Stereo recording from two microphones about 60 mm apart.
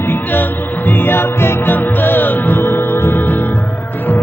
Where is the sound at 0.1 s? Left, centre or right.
Left.